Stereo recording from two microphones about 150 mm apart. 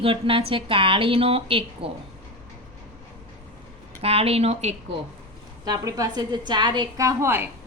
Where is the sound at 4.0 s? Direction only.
40° right (ahead or behind).